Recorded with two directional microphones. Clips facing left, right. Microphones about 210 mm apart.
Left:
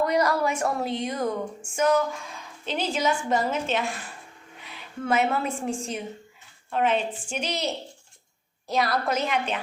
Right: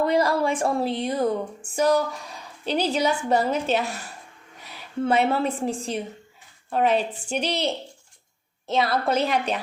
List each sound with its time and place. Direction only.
0.0 s a woman's voice: 30° right (ahead or behind)